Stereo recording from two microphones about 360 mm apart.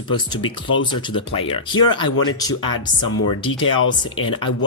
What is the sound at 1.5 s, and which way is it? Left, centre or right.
Speech, centre.